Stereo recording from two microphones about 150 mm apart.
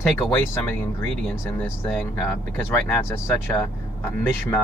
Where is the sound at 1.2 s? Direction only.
10° left (ahead or behind).